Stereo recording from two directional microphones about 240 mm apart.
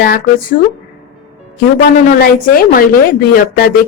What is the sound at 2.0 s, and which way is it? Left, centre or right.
A woman's voice, left.